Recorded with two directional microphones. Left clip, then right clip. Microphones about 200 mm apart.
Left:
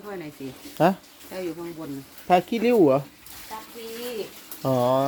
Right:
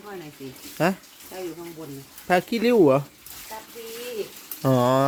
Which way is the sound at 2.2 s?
10° right (ahead or behind).